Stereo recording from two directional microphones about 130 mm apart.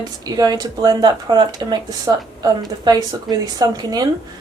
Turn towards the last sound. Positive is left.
turn(degrees=-30)  # may be behind; listen again after turning